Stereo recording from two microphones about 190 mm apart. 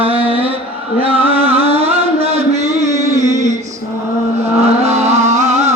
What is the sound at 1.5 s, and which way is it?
Music, 30° right (ahead or behind).